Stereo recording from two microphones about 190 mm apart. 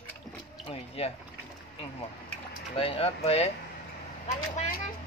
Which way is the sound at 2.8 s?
30° left (ahead or behind).